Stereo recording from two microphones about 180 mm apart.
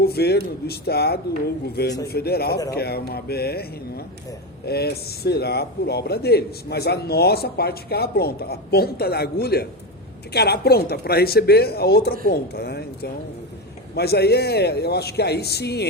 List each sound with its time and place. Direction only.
0.0 s a man's voice: 60° left (ahead or behind)